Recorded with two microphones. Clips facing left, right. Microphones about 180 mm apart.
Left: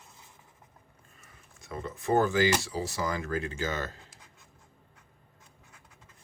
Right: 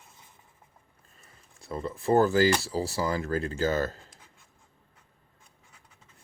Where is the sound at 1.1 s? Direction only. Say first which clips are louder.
Right 1 dB; 35° right (ahead or behind).